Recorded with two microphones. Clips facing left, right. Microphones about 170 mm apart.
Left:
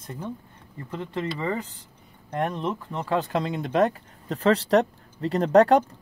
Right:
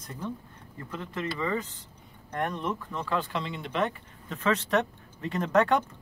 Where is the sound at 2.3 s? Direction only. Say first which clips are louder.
Left 4 dB; 25° left (ahead or behind).